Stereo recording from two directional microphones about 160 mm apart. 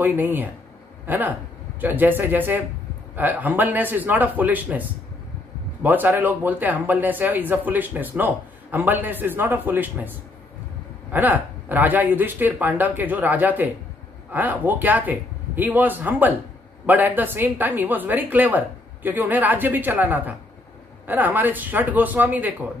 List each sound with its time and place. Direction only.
0.0 s speech: 10° right (ahead or behind)